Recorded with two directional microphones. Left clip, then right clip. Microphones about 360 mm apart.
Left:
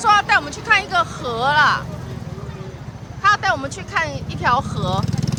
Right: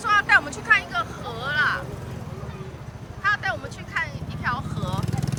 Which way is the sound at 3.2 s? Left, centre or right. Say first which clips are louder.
Left 8 dB; centre.